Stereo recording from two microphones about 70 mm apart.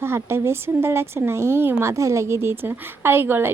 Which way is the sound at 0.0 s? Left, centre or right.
Right.